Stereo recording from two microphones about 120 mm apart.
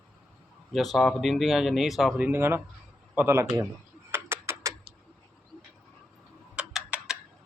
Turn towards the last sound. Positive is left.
turn(degrees=-10)  # may be behind; listen again after turning